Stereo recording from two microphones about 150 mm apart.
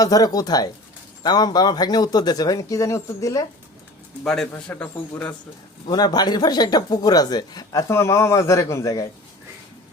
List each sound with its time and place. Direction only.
0.0 s speech: 25° left (ahead or behind)
4.2 s a man's voice: 5° left (ahead or behind)
5.9 s speech: 25° left (ahead or behind)